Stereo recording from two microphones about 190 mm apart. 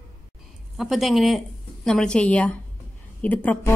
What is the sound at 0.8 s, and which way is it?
A woman's voice, centre (ahead or behind).